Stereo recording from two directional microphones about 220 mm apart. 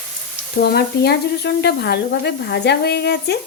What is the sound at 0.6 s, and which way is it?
Sizzle, 45° left (ahead or behind).